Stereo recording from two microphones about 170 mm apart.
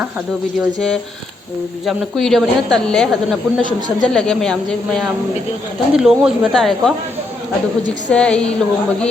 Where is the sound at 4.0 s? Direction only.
5° left (ahead or behind).